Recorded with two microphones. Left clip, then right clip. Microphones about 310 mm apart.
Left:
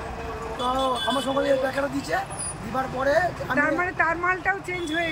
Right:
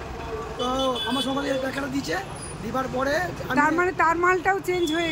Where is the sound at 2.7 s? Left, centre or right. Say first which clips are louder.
Left 2 dB; centre.